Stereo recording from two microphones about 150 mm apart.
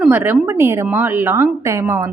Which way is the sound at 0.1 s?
15° right (ahead or behind).